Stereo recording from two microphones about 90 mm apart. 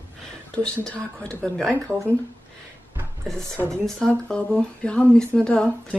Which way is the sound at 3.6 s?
30° right (ahead or behind).